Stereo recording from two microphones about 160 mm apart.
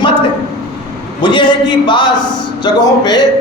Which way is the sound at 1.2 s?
30° left (ahead or behind).